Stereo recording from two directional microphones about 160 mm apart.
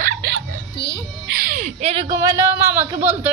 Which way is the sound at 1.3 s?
65° right (ahead or behind).